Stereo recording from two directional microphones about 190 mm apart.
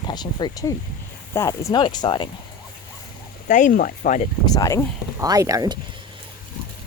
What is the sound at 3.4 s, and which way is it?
Speech, 40° left (ahead or behind).